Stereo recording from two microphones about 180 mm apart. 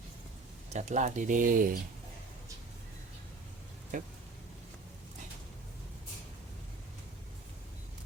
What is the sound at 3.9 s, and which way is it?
Speech, 45° right (ahead or behind).